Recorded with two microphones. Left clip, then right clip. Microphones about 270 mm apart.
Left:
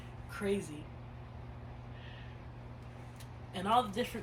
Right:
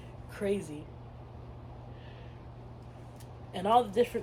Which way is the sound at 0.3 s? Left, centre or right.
Centre.